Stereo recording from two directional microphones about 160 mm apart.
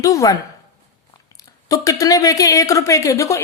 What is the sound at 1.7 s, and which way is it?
Speech, 20° left (ahead or behind).